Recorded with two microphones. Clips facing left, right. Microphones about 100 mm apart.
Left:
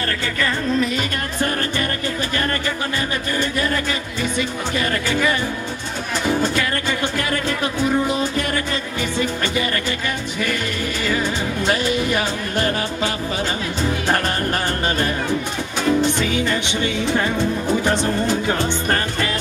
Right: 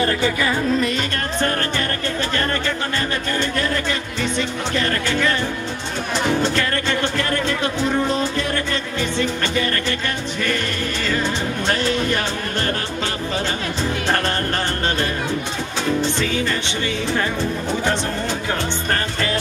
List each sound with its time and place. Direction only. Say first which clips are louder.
0.0 s music: right 4 dB; 15° right (ahead or behind)
0.7 s music: even; 5° left (ahead or behind)
4.4 s music: even; 10° left (ahead or behind)
6.5 s music: right 1 dB; 10° left (ahead or behind)
11.1 s music: even; 10° left (ahead or behind)
16.0 s music: left 2 dB; 15° left (ahead or behind)